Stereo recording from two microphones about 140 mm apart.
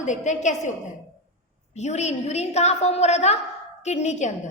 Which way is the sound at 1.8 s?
55° left (ahead or behind).